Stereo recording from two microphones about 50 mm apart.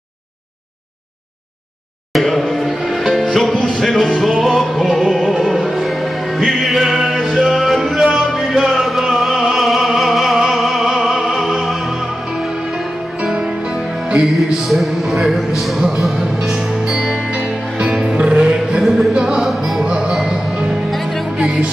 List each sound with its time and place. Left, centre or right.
2.1 s music: centre
14.6 s music: centre
19.8 s music: centre
20.9 s music: centre
21.4 s music: right